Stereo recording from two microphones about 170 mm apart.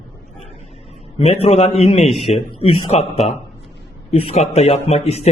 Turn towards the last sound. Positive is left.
turn(degrees=35)  # may be behind; listen again after turning